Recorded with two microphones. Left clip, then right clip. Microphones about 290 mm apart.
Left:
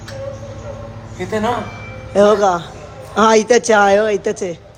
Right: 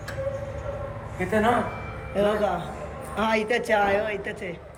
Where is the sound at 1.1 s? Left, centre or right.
Left.